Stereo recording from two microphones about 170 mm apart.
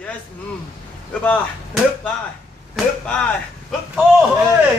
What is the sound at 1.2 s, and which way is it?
Speech, 10° left (ahead or behind).